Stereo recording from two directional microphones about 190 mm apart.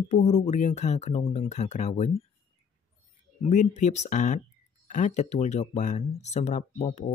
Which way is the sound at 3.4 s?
40° left (ahead or behind).